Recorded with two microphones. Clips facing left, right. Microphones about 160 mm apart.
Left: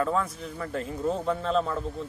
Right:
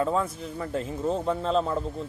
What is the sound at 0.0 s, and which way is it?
A man's voice, 30° right (ahead or behind).